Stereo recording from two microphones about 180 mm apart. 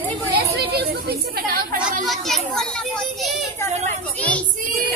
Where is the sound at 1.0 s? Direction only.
55° right (ahead or behind).